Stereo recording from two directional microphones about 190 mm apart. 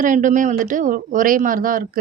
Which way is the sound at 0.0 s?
40° right (ahead or behind).